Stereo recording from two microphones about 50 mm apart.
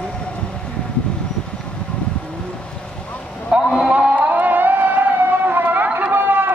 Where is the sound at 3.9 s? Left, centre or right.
Right.